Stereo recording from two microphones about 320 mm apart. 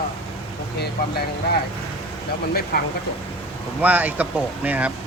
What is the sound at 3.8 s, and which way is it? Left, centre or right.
Speech, centre.